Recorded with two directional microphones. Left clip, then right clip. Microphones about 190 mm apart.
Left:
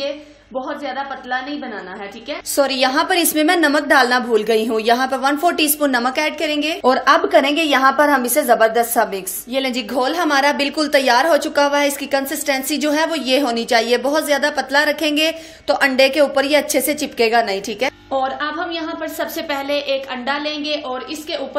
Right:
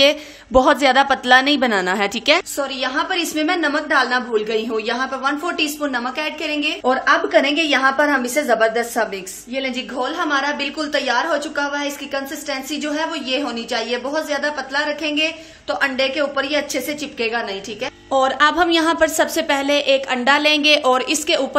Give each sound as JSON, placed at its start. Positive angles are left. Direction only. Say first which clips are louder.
{"t": 0.0, "sound": "a woman's voice", "louder": "right 10 dB", "side_deg": -55}
{"t": 2.5, "sound": "a woman's voice", "louder": "left 6 dB", "side_deg": 35}
{"t": 18.1, "sound": "a woman's voice", "louder": "right 9 dB", "side_deg": -25}
{"t": 18.6, "sound": "a woman's voice", "louder": "right 8 dB", "side_deg": -40}